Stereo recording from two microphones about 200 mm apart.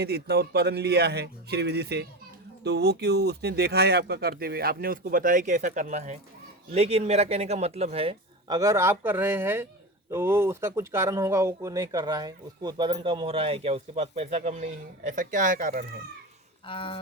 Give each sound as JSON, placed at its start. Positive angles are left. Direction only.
{"t": 0.0, "sound": "speech", "side_deg": -55}
{"t": 16.6, "sound": "speech", "side_deg": 25}